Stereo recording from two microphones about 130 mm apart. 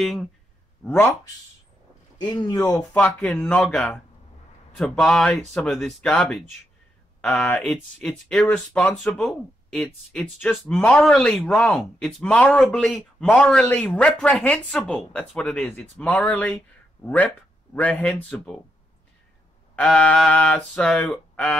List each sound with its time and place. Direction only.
0.0 s speech: centre (ahead or behind)
0.8 s speech: 15° left (ahead or behind)
2.1 s speech: 30° left (ahead or behind)
3.2 s speech: 10° left (ahead or behind)
19.7 s speech: 10° left (ahead or behind)